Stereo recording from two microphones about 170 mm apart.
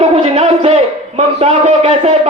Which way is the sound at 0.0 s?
35° right (ahead or behind).